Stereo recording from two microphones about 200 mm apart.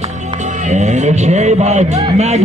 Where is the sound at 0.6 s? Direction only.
35° right (ahead or behind).